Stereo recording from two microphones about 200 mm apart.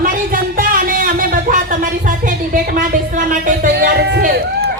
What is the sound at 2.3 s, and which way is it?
Music, 40° right (ahead or behind).